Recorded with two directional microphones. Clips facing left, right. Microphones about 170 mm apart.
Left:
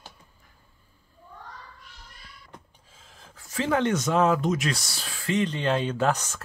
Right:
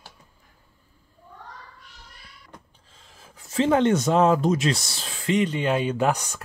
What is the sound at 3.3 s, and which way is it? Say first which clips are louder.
Speech: right 5 dB; 25° right (ahead or behind).